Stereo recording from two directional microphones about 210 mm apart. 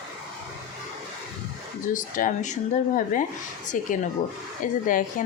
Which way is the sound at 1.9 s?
40° left (ahead or behind).